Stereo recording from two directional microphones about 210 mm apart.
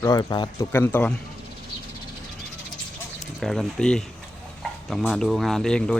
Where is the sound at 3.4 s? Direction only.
Centre (ahead or behind).